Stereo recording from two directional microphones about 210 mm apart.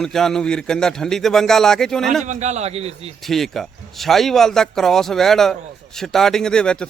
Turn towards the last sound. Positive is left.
turn(degrees=5)  # may be behind; listen again after turning